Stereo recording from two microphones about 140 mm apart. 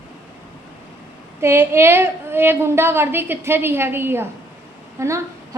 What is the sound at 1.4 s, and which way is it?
A woman's voice, 20° right (ahead or behind).